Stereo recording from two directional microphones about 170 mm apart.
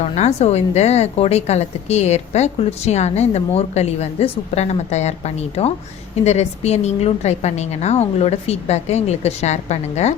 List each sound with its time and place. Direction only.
0.0 s a woman's voice: 40° left (ahead or behind)